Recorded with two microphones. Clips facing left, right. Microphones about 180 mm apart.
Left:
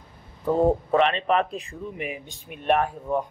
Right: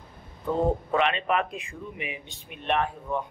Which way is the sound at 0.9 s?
35° left (ahead or behind).